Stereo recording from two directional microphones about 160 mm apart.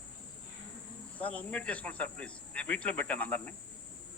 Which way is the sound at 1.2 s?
10° left (ahead or behind).